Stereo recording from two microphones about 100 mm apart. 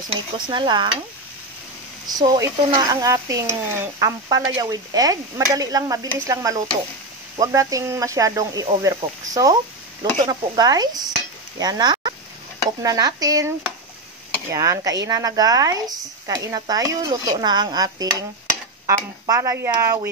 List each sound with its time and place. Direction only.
0.1 s stir: 50° right (ahead or behind)
2.0 s speech: 40° right (ahead or behind); by 3.9 s 25° right (ahead or behind)
4.0 s speech: 40° right (ahead or behind)
10.2 s stir: 45° right (ahead or behind)
11.5 s speech: 45° right (ahead or behind)
14.5 s speech: 35° right (ahead or behind)